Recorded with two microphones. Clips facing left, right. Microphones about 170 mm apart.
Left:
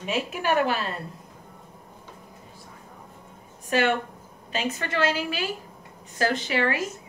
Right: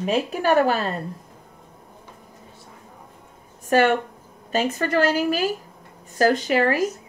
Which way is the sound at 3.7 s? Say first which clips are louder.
Right 5 dB; 45° right (ahead or behind).